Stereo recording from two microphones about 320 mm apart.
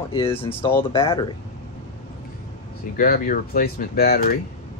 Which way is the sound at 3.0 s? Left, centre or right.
Left.